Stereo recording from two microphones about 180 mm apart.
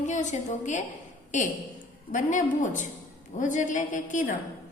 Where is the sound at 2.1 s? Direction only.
45° left (ahead or behind).